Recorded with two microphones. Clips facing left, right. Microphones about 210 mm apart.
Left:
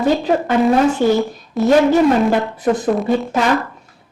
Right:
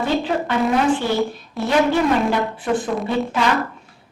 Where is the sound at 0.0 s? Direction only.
45° left (ahead or behind).